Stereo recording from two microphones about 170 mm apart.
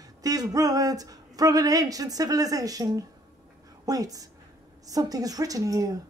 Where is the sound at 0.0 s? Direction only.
20° right (ahead or behind).